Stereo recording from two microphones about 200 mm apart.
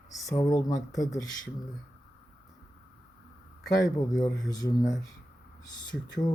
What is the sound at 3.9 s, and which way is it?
Speech, 20° left (ahead or behind).